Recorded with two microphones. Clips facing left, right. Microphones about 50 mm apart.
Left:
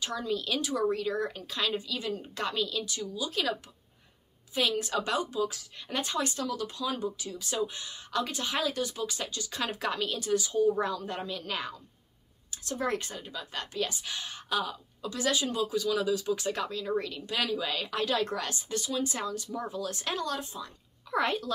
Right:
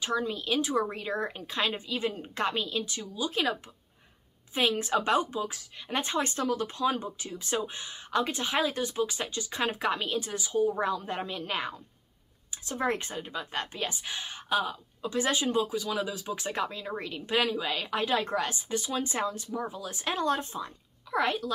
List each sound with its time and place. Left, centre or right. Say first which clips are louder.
0.0 s speech: right 2 dB; right
4.6 s speech: right 2 dB; right
19.5 s speech: even; centre
20.2 s speech: right 5 dB; right
21.1 s a child's voice: right 1 dB; centre